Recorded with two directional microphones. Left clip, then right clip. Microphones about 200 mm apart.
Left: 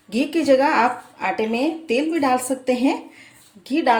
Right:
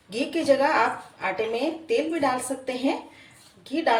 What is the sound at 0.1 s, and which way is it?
Speech, 50° left (ahead or behind).